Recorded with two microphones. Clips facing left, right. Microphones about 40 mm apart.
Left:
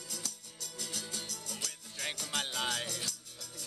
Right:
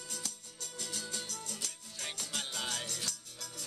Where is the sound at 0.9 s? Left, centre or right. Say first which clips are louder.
Right 1 dB; left.